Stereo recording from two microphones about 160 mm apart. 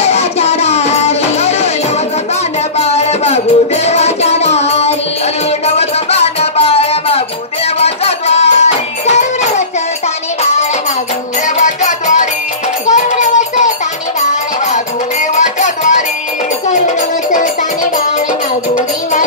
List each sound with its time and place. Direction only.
0.0 s music: 40° left (ahead or behind)
2.8 s music: 40° left (ahead or behind)
11.4 s music: 50° left (ahead or behind)
15.3 s music: 50° left (ahead or behind)